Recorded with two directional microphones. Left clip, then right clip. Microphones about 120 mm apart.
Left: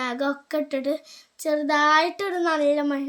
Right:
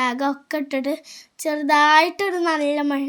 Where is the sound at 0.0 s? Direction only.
40° right (ahead or behind).